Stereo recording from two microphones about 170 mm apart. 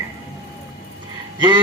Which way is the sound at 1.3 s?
25° right (ahead or behind).